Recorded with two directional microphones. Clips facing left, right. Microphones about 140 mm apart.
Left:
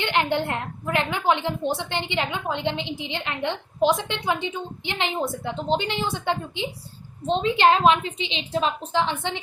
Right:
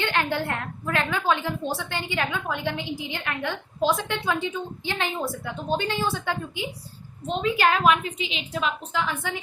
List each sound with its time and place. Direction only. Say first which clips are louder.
0.0 s a woman's voice: left 2 dB; 20° left (ahead or behind)